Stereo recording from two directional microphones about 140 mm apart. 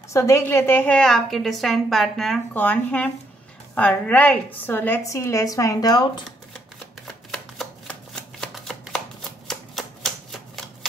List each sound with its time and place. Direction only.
0.1 s a woman's voice: 20° left (ahead or behind); by 2.4 s centre (ahead or behind)
2.5 s a woman's voice: 10° left (ahead or behind); by 6.2 s 30° left (ahead or behind)
7.3 s shuffling cards: 5° left (ahead or behind)
9.5 s typewriter: centre (ahead or behind)